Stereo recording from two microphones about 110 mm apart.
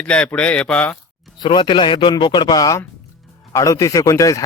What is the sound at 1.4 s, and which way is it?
Speech, 45° left (ahead or behind).